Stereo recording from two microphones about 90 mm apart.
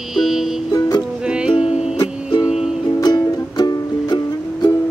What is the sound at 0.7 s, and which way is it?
Music, 40° left (ahead or behind).